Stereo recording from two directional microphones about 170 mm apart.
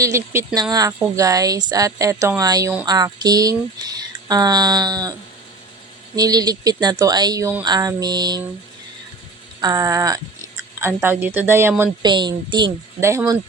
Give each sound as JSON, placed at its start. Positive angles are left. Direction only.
{"t": 0.0, "sound": "speech", "side_deg": -15}
{"t": 6.1, "sound": "speech", "side_deg": -25}
{"t": 9.6, "sound": "speech", "side_deg": -20}
{"t": 12.0, "sound": "speech", "side_deg": -25}
{"t": 13.0, "sound": "speech", "side_deg": -15}